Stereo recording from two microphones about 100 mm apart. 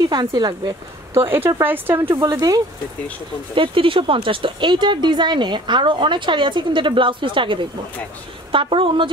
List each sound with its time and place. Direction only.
0.4 s speech: 45° right (ahead or behind)
1.1 s speech: 25° right (ahead or behind)
2.3 s speech: 35° right (ahead or behind)
3.5 s speech: 60° right (ahead or behind)